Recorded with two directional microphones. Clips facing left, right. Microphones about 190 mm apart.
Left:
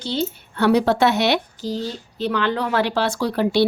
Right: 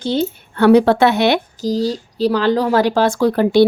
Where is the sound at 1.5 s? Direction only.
40° right (ahead or behind).